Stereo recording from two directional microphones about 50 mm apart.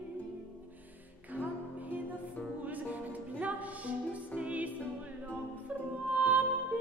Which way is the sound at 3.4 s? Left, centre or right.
Right.